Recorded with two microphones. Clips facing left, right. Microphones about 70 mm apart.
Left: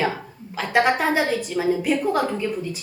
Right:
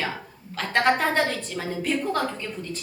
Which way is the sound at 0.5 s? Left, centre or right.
Centre.